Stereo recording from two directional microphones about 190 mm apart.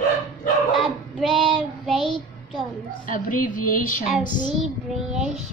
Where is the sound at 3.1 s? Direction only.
45° left (ahead or behind).